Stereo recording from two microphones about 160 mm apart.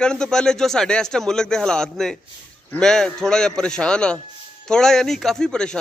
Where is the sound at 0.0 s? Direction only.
5° left (ahead or behind).